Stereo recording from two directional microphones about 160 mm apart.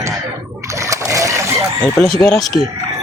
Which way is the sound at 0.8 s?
20° right (ahead or behind).